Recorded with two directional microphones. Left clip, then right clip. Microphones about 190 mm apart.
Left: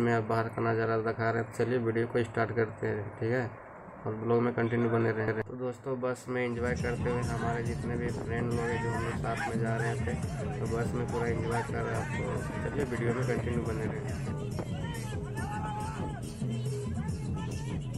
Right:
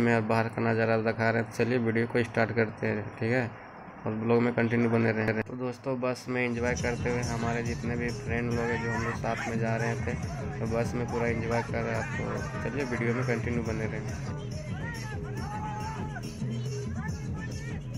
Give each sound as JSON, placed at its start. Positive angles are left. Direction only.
{"t": 0.0, "sound": "speech", "side_deg": -10}